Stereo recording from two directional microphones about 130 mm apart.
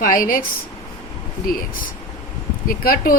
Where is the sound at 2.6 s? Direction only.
90° left.